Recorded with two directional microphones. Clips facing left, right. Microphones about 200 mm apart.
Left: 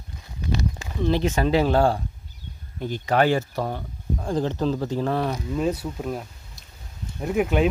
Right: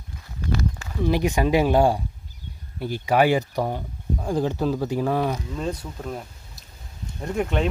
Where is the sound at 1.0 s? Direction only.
15° right (ahead or behind).